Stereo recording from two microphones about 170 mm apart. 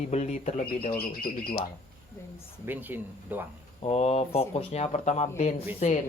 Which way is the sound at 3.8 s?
35° left (ahead or behind).